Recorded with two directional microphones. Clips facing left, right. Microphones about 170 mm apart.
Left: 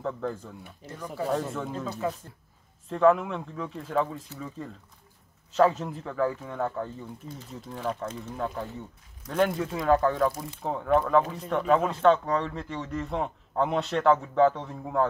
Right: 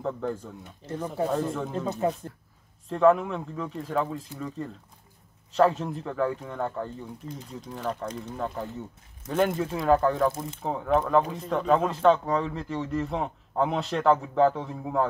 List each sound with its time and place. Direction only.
0.0 s speech: centre (ahead or behind)
0.8 s speech: 30° right (ahead or behind)
1.3 s speech: centre (ahead or behind)
2.9 s speech: centre (ahead or behind)
5.5 s speech: centre (ahead or behind)